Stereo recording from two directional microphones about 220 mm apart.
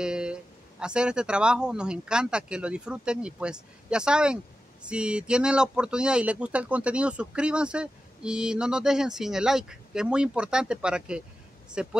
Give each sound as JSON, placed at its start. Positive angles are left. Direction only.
{"t": 0.0, "sound": "speech", "side_deg": -5}